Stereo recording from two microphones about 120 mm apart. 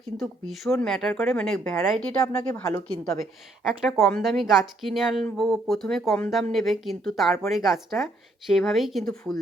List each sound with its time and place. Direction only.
0.2 s speech: centre (ahead or behind)
3.6 s speech: 5° right (ahead or behind)